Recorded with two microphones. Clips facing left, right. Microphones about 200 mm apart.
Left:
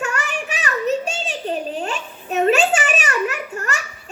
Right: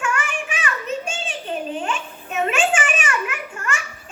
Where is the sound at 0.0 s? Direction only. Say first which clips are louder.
Even; 40° left (ahead or behind).